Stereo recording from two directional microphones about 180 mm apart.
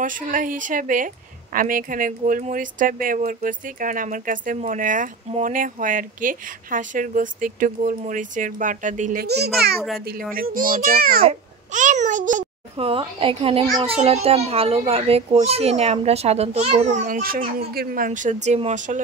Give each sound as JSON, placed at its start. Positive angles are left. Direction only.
{"t": 0.0, "sound": "a woman's voice", "side_deg": -50}
{"t": 9.2, "sound": "a child's voice", "side_deg": -65}
{"t": 9.8, "sound": "a child's voice", "side_deg": 0}
{"t": 10.3, "sound": "a woman's voice", "side_deg": -50}
{"t": 11.2, "sound": "a child's voice", "side_deg": -45}
{"t": 12.8, "sound": "a child's voice", "side_deg": -30}